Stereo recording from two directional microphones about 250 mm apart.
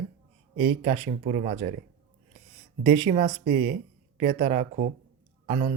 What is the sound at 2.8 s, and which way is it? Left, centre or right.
Speech, right.